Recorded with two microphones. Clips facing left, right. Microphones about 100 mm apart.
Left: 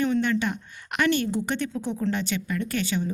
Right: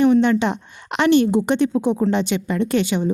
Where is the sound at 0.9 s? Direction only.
25° right (ahead or behind).